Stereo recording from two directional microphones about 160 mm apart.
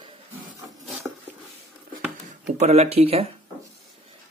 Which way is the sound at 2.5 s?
45° right (ahead or behind).